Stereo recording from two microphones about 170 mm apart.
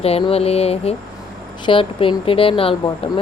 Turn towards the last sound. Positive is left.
turn(degrees=35)  # may be behind; listen again after turning